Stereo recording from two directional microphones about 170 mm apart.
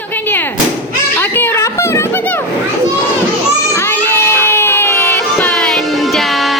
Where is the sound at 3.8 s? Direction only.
15° left (ahead or behind).